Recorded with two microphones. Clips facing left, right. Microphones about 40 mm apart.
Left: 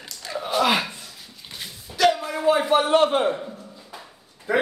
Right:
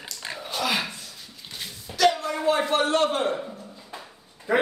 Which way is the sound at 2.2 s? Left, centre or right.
Centre.